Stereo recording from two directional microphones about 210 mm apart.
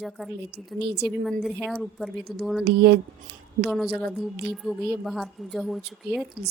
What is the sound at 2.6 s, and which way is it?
Speech, 50° right (ahead or behind).